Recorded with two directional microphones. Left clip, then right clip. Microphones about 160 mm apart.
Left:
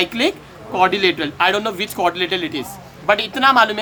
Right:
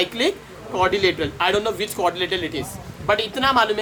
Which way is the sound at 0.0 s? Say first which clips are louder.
Left 3 dB; 65° left (ahead or behind).